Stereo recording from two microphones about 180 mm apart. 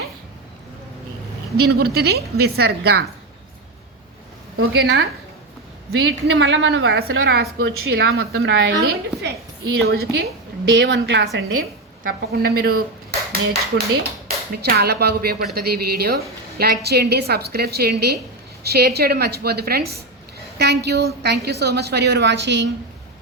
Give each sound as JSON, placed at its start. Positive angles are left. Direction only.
{"t": 1.6, "sound": "a woman's voice", "side_deg": -60}
{"t": 4.8, "sound": "a woman's voice", "side_deg": -60}
{"t": 6.0, "sound": "a woman's voice", "side_deg": -80}
{"t": 9.8, "sound": "a woman's voice", "side_deg": -60}
{"t": 10.7, "sound": "a woman's voice", "side_deg": -80}
{"t": 12.0, "sound": "a woman's voice", "side_deg": -60}
{"t": 20.6, "sound": "a woman's voice", "side_deg": -70}